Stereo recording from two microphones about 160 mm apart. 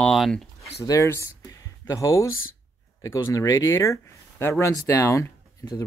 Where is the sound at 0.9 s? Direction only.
20° left (ahead or behind).